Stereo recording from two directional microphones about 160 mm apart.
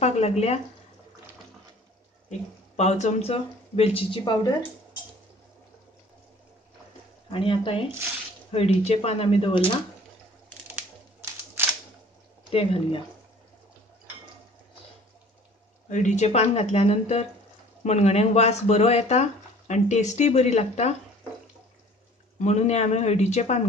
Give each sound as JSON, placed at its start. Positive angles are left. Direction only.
{"t": 0.0, "sound": "speech", "side_deg": 40}
{"t": 2.2, "sound": "speech", "side_deg": 45}
{"t": 7.2, "sound": "speech", "side_deg": 35}
{"t": 12.4, "sound": "speech", "side_deg": 35}
{"t": 15.9, "sound": "speech", "side_deg": 50}
{"t": 22.4, "sound": "speech", "side_deg": 45}